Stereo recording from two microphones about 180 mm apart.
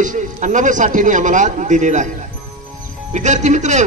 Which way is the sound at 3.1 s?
40° right (ahead or behind).